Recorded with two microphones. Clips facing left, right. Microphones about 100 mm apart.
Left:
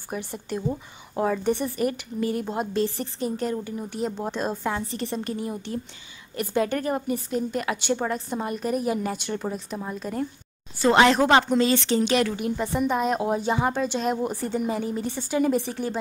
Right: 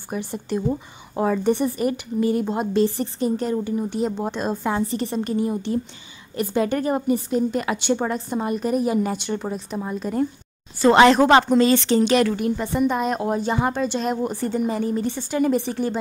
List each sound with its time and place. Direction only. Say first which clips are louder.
0.1 s speech: right 5 dB; centre (ahead or behind)
11.2 s speech: right 4 dB; 45° right (ahead or behind)
11.5 s a woman's voice: right 4 dB; 15° left (ahead or behind)